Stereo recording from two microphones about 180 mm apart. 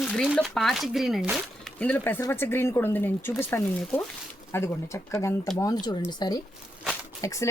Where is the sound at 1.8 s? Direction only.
10° left (ahead or behind).